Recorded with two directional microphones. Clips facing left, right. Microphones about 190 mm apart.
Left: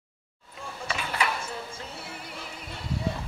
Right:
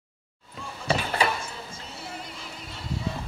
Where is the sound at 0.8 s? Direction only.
35° right (ahead or behind).